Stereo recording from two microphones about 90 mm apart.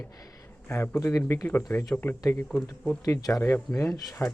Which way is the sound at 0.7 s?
25° left (ahead or behind).